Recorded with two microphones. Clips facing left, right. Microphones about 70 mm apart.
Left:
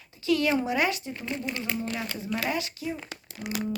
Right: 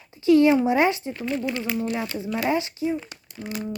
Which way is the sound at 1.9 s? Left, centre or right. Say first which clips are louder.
Right 4 dB; right.